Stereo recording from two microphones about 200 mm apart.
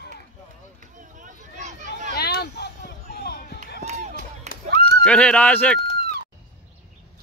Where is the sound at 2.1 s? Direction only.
55° left (ahead or behind).